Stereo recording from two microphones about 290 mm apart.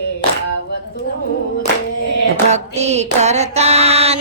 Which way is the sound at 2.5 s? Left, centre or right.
Right.